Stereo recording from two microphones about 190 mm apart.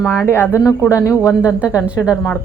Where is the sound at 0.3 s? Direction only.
10° left (ahead or behind).